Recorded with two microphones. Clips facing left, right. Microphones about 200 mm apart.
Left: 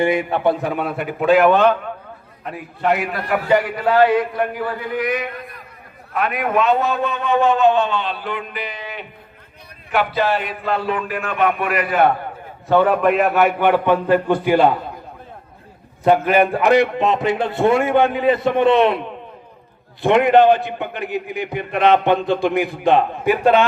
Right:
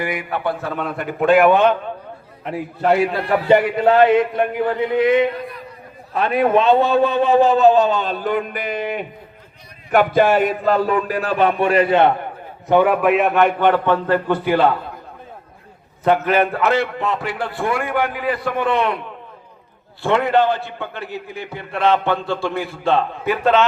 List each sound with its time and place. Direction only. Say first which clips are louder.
0.0 s a man's voice: left 6 dB; 25° left (ahead or behind); by 1.5 s centre (ahead or behind)
1.5 s a man's voice: even; 20° right (ahead or behind)
2.4 s a man's voice: right 2 dB; 30° right (ahead or behind)
12.6 s a man's voice: even; 10° right (ahead or behind); by 14.8 s 15° left (ahead or behind)
16.0 s a man's voice: left 2 dB; 10° left (ahead or behind)